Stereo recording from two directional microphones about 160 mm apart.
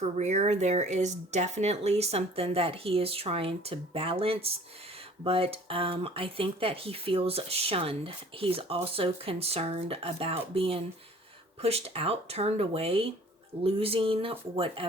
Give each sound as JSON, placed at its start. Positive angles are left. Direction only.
{"t": 0.0, "sound": "speech", "side_deg": -45}